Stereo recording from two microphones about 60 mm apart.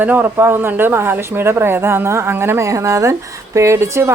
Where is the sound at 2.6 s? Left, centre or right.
Right.